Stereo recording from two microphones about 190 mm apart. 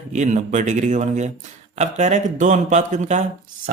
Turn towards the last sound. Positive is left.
turn(degrees=-40)  # may be behind; listen again after turning